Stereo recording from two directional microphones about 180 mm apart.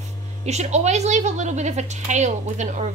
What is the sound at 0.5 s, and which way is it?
A woman's voice, 40° right (ahead or behind).